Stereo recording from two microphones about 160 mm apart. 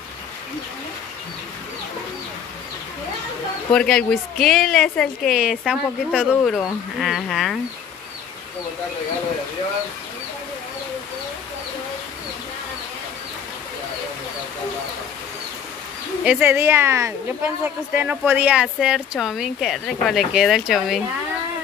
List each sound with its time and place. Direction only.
3.7 s a woman's voice: 5° left (ahead or behind)
16.3 s a woman's voice: 10° right (ahead or behind)